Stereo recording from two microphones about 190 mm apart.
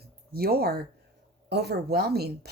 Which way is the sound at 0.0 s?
55° right (ahead or behind).